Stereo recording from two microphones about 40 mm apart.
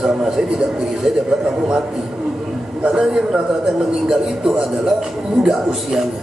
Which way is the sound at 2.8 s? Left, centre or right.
Right.